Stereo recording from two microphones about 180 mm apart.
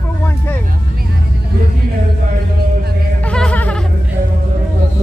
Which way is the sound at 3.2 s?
5° left (ahead or behind).